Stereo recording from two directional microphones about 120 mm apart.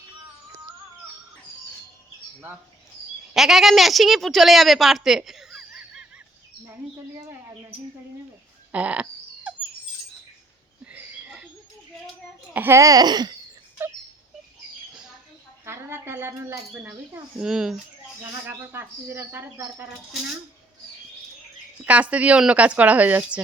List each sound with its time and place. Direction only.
3.3 s a woman's voice: centre (ahead or behind)
8.7 s dog: 10° right (ahead or behind)
10.8 s a sound: 10° right (ahead or behind)
12.5 s speech: 20° right (ahead or behind)
15.6 s speech: 20° right (ahead or behind)
17.4 s speech: 5° right (ahead or behind)
18.4 s speech: 20° right (ahead or behind)
21.8 s speech: 10° right (ahead or behind)